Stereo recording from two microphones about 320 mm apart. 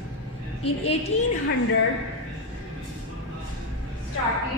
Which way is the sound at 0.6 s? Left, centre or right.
Centre.